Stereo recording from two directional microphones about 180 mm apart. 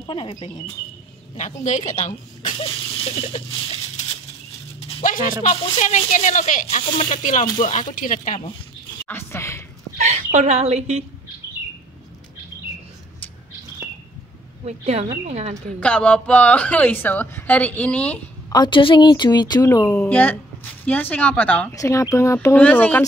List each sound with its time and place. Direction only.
0.0 s speech: 25° left (ahead or behind)
1.6 s speech: 45° left (ahead or behind)
2.7 s rattle: 30° left (ahead or behind)
5.0 s a sound: 50° left (ahead or behind)
5.4 s speech: 40° left (ahead or behind)
7.6 s speech: 45° left (ahead or behind)
9.0 s speech: 15° left (ahead or behind)
9.9 s speech: 40° right (ahead or behind)
14.6 s speech: 35° right (ahead or behind)
15.8 s a woman's voice: 5° left (ahead or behind)
18.5 s a woman's voice: 25° left (ahead or behind); by 23.0 s 10° left (ahead or behind)